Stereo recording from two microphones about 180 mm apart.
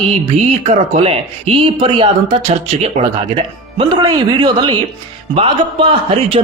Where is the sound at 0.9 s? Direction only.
35° right (ahead or behind).